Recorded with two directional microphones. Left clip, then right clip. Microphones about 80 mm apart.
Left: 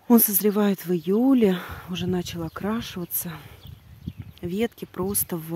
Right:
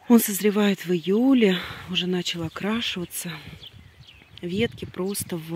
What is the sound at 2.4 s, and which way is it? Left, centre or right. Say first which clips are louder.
Speech: right 3 dB; centre.